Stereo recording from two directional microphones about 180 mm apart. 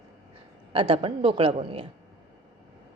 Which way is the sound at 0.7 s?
30° right (ahead or behind).